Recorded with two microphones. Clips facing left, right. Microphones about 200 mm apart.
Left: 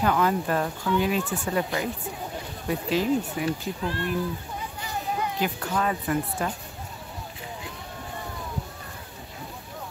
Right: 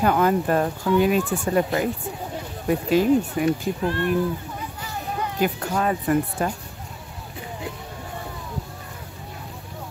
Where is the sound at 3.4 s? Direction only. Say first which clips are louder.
Right 6 dB; 45° right (ahead or behind).